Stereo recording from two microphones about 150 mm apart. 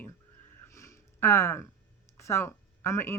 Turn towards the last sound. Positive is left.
turn(degrees=15)  # may be behind; listen again after turning